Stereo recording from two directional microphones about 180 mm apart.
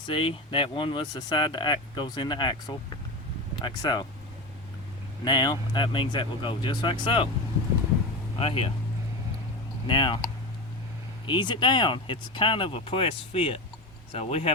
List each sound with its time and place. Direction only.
0.0 s speech: 30° left (ahead or behind)
5.2 s speech: 25° left (ahead or behind)
8.4 s speech: 35° left (ahead or behind)
9.8 s speech: 25° left (ahead or behind)
11.3 s speech: 25° left (ahead or behind)